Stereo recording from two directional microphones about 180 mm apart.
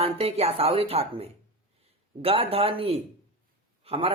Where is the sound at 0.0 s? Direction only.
35° right (ahead or behind).